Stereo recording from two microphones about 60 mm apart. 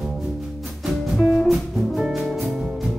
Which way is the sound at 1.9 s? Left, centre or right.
Centre.